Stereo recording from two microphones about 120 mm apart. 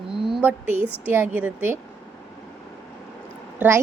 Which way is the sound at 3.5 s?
20° right (ahead or behind).